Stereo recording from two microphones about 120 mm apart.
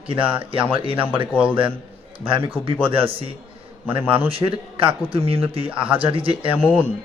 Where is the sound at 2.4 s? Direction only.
50° right (ahead or behind).